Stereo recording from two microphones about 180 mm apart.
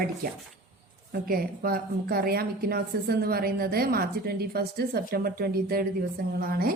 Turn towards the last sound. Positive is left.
turn(degrees=-55)  # may be behind; listen again after turning